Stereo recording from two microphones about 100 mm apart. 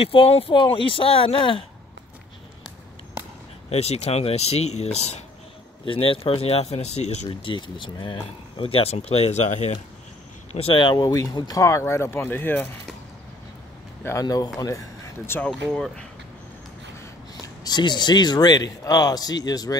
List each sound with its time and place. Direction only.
0.0 s speech: 70° left (ahead or behind)
3.7 s speech: 90° left
5.9 s speech: 65° left (ahead or behind); by 7.2 s 90° left
7.4 s speech: 55° left (ahead or behind); by 9.4 s 90° left
10.5 s speech: 80° left
10.8 s a man's voice: 45° left (ahead or behind); by 12.6 s 20° left (ahead or behind)
14.2 s a man's voice: 45° left (ahead or behind)
15.4 s speech: 10° left (ahead or behind)
17.6 s a man's voice: 45° left (ahead or behind)